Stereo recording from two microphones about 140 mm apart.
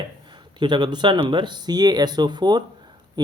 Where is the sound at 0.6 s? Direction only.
30° right (ahead or behind).